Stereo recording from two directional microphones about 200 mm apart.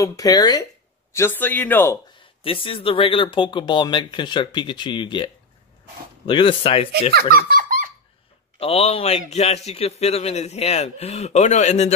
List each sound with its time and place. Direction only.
0.0 s speech: 15° left (ahead or behind)
2.4 s speech: 25° left (ahead or behind)
7.2 s giggle: 45° right (ahead or behind)
8.5 s a man's voice: 30° left (ahead or behind)